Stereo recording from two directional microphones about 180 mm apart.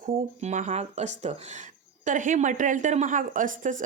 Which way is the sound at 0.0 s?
45° right (ahead or behind).